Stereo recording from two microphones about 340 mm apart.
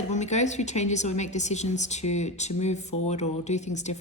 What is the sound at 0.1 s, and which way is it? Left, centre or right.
A woman's voice, centre.